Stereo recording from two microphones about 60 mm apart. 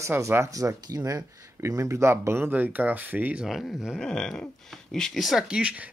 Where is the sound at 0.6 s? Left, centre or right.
Right.